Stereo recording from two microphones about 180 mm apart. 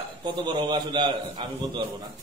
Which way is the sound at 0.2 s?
25° right (ahead or behind).